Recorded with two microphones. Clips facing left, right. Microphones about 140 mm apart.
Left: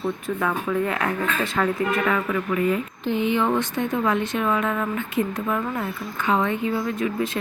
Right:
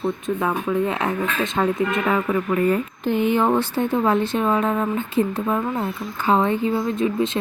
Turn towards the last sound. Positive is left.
turn(degrees=-25)  # may be behind; listen again after turning